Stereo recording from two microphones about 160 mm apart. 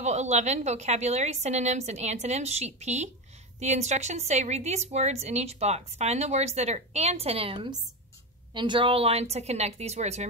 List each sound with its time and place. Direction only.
0.0 s a woman's voice: 45° right (ahead or behind)